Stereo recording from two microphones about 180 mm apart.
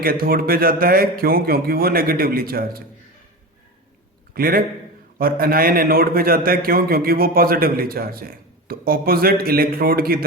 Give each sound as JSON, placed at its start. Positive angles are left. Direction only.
{"t": 0.0, "sound": "a man's voice", "side_deg": -55}
{"t": 4.4, "sound": "a man's voice", "side_deg": -55}